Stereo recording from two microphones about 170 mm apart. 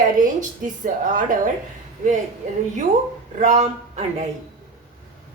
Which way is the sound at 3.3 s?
45° right (ahead or behind).